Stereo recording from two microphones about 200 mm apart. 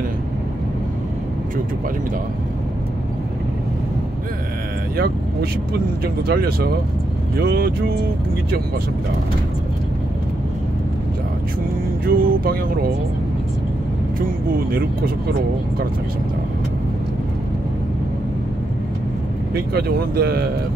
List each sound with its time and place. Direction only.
4.9 s speech: 50° right (ahead or behind)
12.1 s speech: 45° right (ahead or behind)
14.2 s speech: 45° right (ahead or behind)
19.5 s speech: 50° right (ahead or behind)